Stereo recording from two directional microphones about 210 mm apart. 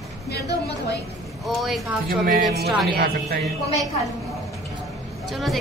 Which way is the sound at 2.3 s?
40° right (ahead or behind).